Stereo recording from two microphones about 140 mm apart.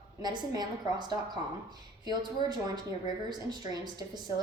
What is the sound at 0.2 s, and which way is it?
A woman's voice, 30° right (ahead or behind).